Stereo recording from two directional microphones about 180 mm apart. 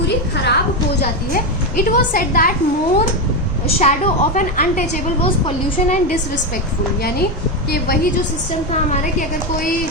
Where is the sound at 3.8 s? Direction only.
40° left (ahead or behind).